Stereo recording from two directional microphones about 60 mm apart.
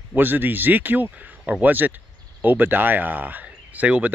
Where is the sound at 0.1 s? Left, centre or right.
Right.